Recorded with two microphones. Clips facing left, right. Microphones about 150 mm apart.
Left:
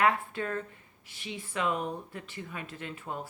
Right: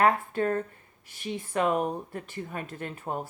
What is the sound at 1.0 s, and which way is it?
A woman's voice, 50° right (ahead or behind).